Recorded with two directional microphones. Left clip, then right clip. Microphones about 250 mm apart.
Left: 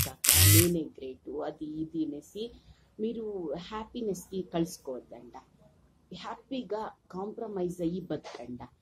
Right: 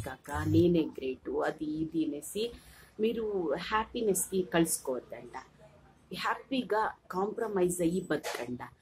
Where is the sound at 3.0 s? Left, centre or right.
Centre.